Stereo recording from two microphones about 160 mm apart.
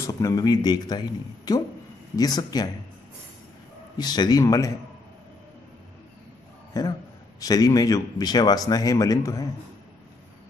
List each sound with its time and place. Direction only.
0.0 s speech: 20° left (ahead or behind)
4.0 s speech: 25° left (ahead or behind)
6.7 s speech: 20° left (ahead or behind)